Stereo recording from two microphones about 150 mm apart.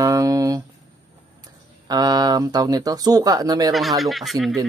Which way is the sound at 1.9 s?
25° right (ahead or behind).